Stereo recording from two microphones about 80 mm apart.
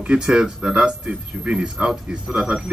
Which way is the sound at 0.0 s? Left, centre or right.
Centre.